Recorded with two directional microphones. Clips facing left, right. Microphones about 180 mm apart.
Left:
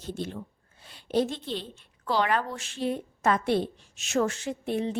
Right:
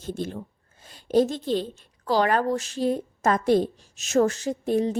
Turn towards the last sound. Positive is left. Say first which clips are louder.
# right 5 dB
turn(degrees=-40)  # may be behind; listen again after turning